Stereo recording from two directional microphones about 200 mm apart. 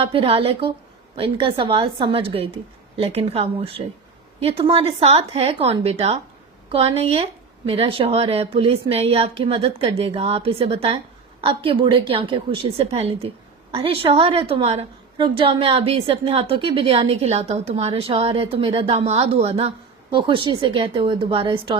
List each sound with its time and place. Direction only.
0.0 s a woman's voice: 25° right (ahead or behind)